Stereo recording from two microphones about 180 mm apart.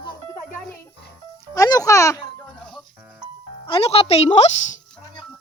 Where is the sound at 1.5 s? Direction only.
20° left (ahead or behind).